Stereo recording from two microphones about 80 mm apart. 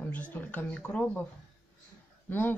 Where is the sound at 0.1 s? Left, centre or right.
Left.